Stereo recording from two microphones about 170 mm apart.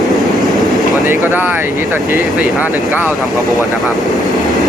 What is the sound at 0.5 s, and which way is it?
Vehicle, centre (ahead or behind).